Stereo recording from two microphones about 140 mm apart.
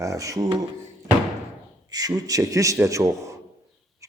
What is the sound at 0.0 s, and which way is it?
Speech, 25° right (ahead or behind).